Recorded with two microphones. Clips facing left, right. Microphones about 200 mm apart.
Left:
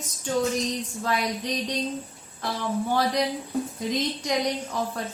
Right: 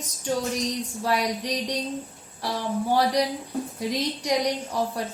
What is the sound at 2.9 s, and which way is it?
Speech, 15° right (ahead or behind).